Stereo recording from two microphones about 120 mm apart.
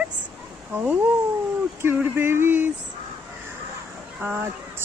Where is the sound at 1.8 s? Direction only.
20° right (ahead or behind).